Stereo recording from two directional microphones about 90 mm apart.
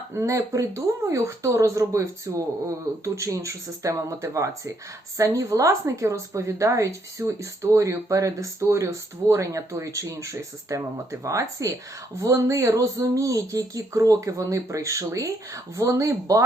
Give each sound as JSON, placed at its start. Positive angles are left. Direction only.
{"t": 0.1, "sound": "a woman's voice", "side_deg": -35}